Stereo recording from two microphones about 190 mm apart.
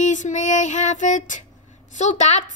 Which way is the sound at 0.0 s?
40° left (ahead or behind).